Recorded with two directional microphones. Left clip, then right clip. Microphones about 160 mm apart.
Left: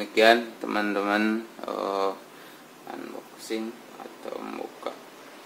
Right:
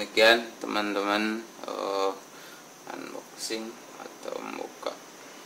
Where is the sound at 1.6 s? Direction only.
40° left (ahead or behind).